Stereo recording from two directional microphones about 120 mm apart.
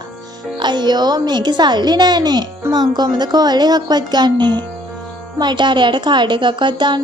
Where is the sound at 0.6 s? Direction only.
40° right (ahead or behind).